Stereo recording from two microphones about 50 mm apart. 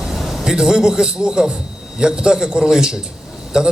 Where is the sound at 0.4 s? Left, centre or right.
Centre.